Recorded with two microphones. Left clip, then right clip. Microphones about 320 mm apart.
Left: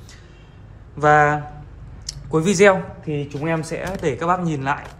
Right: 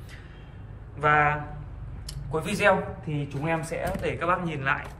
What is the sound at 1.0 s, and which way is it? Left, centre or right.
Speech, centre.